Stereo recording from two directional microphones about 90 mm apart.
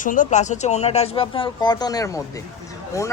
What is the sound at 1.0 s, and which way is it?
Speech, 90° left.